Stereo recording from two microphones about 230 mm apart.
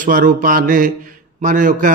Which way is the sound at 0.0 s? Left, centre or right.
Right.